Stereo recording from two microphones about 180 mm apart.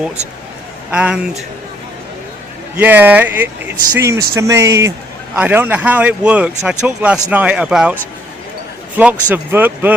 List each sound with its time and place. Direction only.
0.9 s a man's voice: 5° right (ahead or behind)
2.7 s speech: 10° right (ahead or behind)
9.0 s speech: 10° right (ahead or behind)